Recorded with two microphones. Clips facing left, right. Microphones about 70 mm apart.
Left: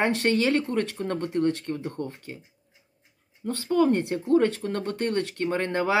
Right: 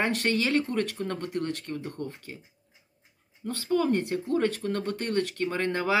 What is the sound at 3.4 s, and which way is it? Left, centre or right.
Speech, left.